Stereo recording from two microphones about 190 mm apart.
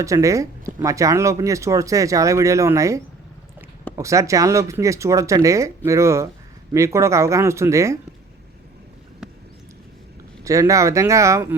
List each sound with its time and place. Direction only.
0.0 s speech: 15° right (ahead or behind)
10.4 s speech: 15° right (ahead or behind)